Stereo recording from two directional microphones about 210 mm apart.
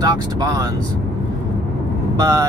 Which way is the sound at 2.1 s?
15° right (ahead or behind).